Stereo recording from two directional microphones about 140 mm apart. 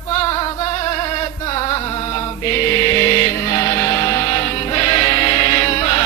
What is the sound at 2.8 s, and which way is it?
Music, 25° left (ahead or behind).